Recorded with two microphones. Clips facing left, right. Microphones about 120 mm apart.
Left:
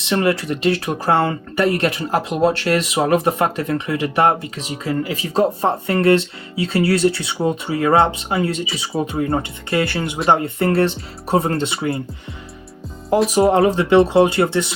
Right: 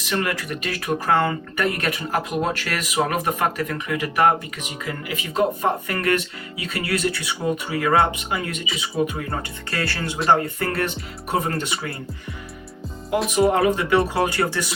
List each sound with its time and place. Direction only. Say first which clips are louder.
0.0 s speech: left 7 dB; 25° left (ahead or behind)
13.3 s speech: left 2 dB; 30° left (ahead or behind)